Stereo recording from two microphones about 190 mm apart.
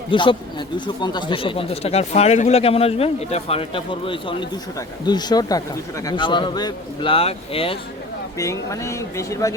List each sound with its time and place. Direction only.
0.1 s speech: 25° left (ahead or behind)
8.4 s speech: 15° left (ahead or behind)